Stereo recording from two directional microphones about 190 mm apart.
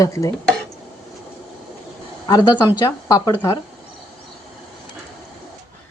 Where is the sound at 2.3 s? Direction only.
20° left (ahead or behind).